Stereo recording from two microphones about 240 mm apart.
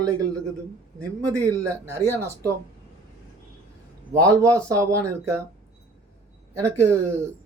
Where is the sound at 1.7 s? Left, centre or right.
Centre.